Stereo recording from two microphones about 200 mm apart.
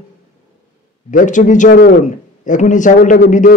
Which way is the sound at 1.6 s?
50° left (ahead or behind).